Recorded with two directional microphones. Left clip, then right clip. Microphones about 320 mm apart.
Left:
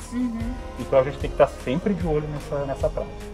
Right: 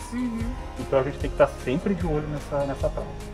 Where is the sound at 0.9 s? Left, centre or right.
Centre.